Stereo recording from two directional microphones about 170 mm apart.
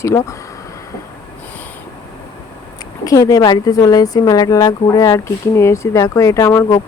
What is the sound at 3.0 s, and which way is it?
Speech, 20° left (ahead or behind).